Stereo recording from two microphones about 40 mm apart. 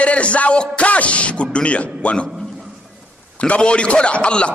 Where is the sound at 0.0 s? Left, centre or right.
Left.